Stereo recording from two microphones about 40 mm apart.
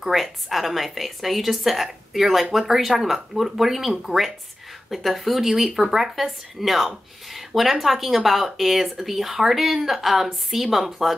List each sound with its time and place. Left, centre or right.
0.0 s speech: centre